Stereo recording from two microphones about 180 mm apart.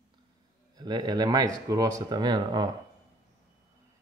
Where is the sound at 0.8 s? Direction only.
25° right (ahead or behind).